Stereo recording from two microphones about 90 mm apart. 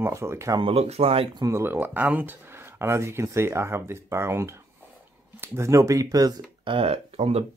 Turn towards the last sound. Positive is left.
turn(degrees=-90)